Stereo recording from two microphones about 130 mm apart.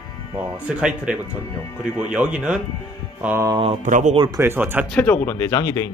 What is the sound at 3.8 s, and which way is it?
Speech, 75° right (ahead or behind).